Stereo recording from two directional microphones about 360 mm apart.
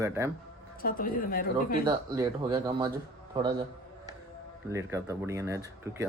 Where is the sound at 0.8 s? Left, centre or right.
Left.